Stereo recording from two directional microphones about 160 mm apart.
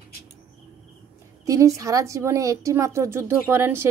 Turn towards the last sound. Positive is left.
turn(degrees=-15)  # may be behind; listen again after turning